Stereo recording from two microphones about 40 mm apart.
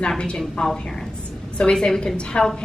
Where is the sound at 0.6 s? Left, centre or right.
Left.